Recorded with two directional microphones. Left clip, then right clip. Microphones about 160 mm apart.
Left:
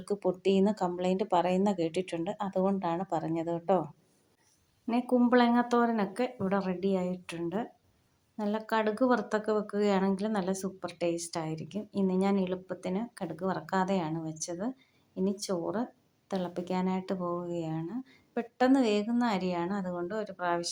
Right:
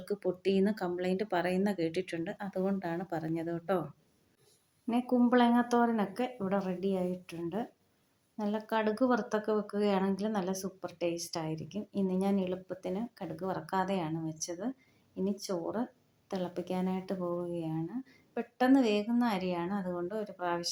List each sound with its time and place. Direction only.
0.0 s speech: 20° left (ahead or behind)
4.9 s speech: 25° left (ahead or behind)